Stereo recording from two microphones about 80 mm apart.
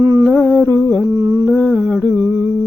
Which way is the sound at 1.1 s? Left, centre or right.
Right.